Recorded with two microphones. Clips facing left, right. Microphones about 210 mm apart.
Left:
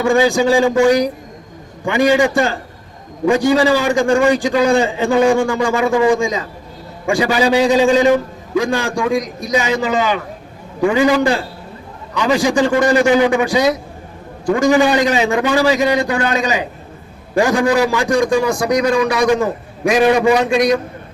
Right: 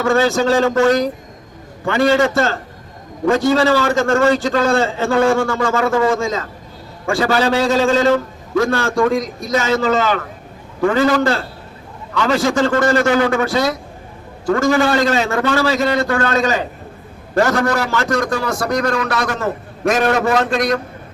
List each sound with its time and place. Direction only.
0.0 s a man's voice: 15° left (ahead or behind)